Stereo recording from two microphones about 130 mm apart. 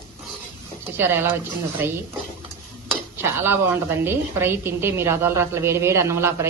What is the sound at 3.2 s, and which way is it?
A woman's voice, 15° right (ahead or behind).